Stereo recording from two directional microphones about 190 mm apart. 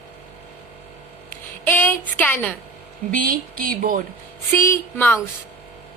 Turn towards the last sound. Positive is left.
turn(degrees=10)  # may be behind; listen again after turning